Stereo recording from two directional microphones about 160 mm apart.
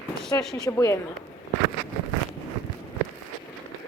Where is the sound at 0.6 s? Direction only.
20° left (ahead or behind).